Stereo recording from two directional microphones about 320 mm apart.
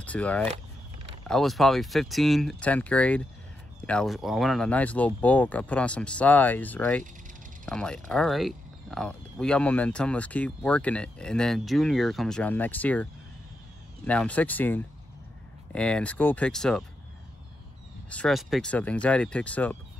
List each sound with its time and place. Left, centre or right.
0.0 s speech: centre
18.1 s speech: centre